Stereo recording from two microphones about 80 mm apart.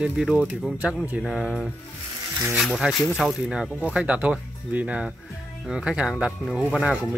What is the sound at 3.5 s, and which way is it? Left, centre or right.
Speech, centre.